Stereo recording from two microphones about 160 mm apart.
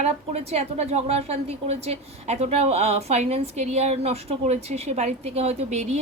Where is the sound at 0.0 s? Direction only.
40° right (ahead or behind).